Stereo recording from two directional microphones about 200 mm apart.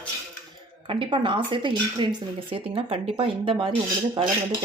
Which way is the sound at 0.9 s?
25° right (ahead or behind).